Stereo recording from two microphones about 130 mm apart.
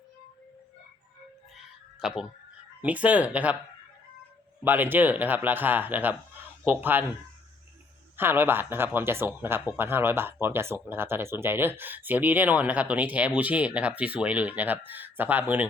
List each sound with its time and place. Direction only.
2.0 s speech: 5° right (ahead or behind)
4.6 s speech: 15° right (ahead or behind)
8.1 s speech: 15° right (ahead or behind)